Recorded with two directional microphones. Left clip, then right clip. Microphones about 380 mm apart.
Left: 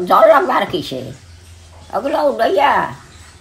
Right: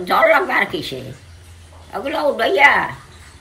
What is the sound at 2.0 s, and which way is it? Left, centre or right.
Speech, centre.